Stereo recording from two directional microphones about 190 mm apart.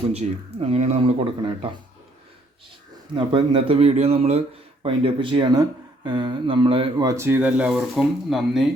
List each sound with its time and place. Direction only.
0.1 s speech: 35° right (ahead or behind)
3.2 s speech: 25° right (ahead or behind)
7.2 s speech: 10° right (ahead or behind)